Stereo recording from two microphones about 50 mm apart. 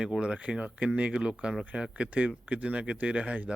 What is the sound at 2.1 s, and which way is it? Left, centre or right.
Speech, right.